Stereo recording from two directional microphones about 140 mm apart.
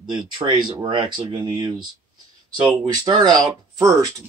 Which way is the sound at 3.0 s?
30° right (ahead or behind).